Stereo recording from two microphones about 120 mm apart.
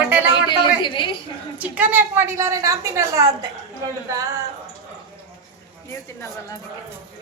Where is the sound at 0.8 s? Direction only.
45° left (ahead or behind).